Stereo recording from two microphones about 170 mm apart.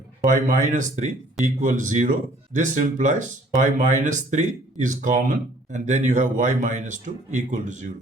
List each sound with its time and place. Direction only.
0.3 s speech: 45° right (ahead or behind)